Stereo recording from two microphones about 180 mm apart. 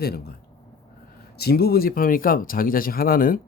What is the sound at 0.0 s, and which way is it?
Speech, 60° left (ahead or behind).